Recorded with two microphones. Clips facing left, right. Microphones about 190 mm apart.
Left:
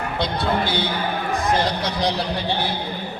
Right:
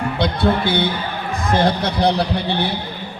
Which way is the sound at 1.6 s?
60° right (ahead or behind).